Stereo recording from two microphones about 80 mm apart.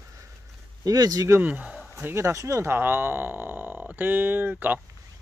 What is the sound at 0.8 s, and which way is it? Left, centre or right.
Speech, right.